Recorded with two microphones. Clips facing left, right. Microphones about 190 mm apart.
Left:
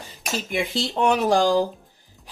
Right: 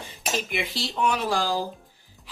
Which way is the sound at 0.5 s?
45° left (ahead or behind).